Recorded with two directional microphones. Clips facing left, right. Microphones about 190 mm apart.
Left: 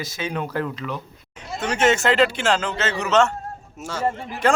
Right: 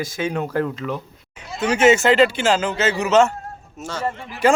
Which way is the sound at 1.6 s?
5° right (ahead or behind).